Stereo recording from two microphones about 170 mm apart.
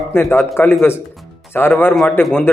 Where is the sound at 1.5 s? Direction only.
15° left (ahead or behind).